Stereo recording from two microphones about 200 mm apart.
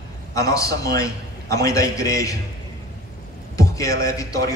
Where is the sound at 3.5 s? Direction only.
15° left (ahead or behind).